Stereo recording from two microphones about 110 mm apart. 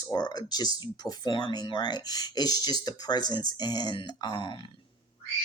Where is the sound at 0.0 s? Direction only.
40° left (ahead or behind).